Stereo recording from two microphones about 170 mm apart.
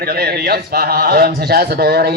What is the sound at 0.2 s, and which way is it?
Speech, 65° right (ahead or behind).